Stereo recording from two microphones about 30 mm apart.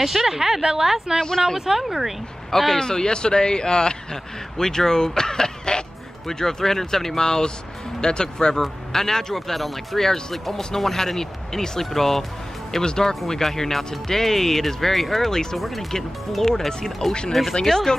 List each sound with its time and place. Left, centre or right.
0.0 s speech: centre
0.4 s speech: right
1.7 s speech: centre
2.5 s speech: centre
2.8 s a man's voice: left
10.3 s speech: centre
12.8 s a man's voice: left; by 15.9 s centre
16.4 s a man's voice: centre